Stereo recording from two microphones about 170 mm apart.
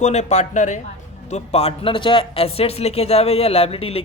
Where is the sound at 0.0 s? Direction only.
40° left (ahead or behind).